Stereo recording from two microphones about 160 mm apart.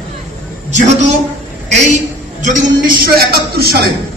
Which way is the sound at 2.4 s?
55° right (ahead or behind).